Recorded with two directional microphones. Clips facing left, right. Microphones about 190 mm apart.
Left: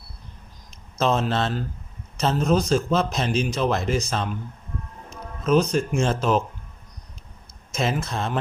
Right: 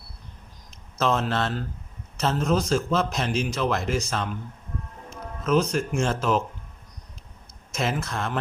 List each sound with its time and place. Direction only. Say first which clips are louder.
0.9 s a man's voice: left 2 dB; 20° left (ahead or behind)
5.5 s a man's voice: left 3 dB; 20° left (ahead or behind)
7.7 s a man's voice: left 2 dB; 20° left (ahead or behind)